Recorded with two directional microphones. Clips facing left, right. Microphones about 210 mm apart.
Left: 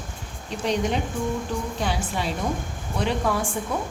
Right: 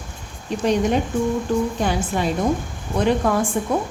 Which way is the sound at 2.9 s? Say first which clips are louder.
Right 6 dB; 50° right (ahead or behind).